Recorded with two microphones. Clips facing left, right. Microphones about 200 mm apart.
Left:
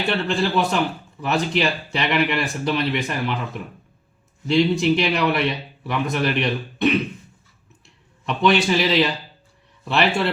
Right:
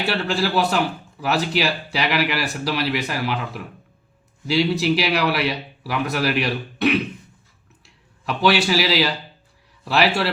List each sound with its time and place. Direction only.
0.0 s a man's voice: 5° right (ahead or behind)
8.2 s a man's voice: 5° right (ahead or behind)